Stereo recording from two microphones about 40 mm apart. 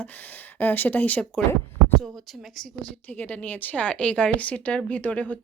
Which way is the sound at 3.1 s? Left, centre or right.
Left.